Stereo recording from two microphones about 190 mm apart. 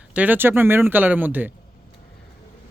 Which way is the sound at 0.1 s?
10° right (ahead or behind).